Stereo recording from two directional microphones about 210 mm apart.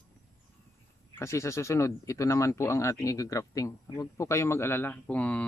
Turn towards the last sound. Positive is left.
turn(degrees=5)  # may be behind; listen again after turning